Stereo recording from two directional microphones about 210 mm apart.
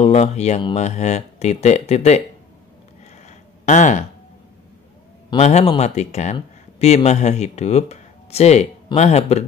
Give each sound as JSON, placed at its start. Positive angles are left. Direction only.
{"t": 0.0, "sound": "speech", "side_deg": 30}
{"t": 3.3, "sound": "a sound", "side_deg": 35}
{"t": 5.3, "sound": "speech", "side_deg": 30}